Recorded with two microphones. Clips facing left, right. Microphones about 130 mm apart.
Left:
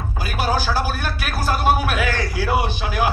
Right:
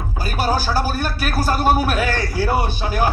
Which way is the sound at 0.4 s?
40° right (ahead or behind).